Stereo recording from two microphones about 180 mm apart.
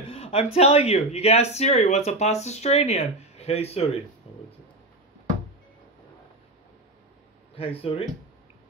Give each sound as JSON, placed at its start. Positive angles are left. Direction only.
{"t": 0.1, "sound": "speech", "side_deg": 35}
{"t": 4.2, "sound": "a sound", "side_deg": 35}
{"t": 7.5, "sound": "speech", "side_deg": 35}